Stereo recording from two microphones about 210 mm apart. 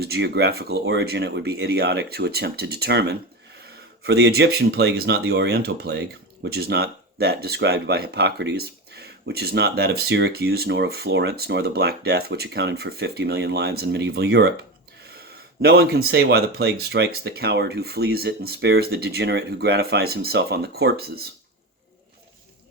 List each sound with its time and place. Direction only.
0.0 s speech: 50° right (ahead or behind)